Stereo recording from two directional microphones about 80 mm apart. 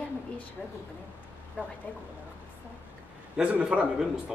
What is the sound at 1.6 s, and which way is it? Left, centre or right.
Speech, centre.